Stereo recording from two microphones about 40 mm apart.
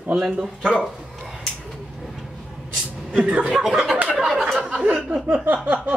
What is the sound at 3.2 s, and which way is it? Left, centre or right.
Speech, right.